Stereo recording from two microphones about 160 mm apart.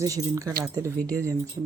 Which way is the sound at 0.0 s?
20° right (ahead or behind).